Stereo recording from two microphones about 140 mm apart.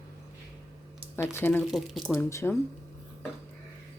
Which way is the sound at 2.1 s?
20° left (ahead or behind).